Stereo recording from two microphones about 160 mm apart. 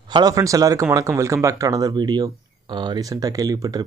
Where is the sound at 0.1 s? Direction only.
20° right (ahead or behind).